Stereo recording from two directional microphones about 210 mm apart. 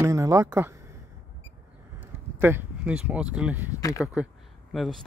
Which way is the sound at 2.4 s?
10° right (ahead or behind).